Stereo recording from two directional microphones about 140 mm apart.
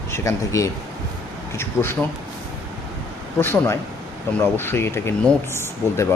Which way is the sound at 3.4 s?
15° left (ahead or behind).